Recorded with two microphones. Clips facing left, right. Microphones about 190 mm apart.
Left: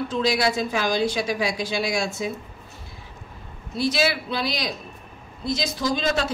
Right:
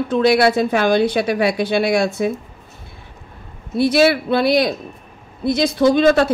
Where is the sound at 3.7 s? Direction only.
60° right (ahead or behind).